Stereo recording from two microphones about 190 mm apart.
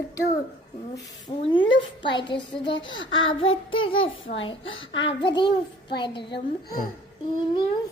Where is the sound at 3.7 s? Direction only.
30° left (ahead or behind).